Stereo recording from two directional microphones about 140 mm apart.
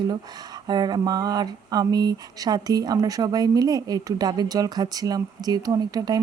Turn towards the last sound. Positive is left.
turn(degrees=-30)  # may be behind; listen again after turning